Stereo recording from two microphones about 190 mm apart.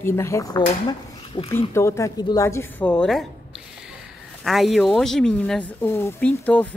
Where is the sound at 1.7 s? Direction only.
15° left (ahead or behind).